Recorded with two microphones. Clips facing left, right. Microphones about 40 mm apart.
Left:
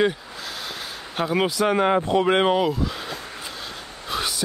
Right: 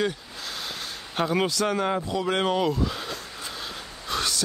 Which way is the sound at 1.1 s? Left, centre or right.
Centre.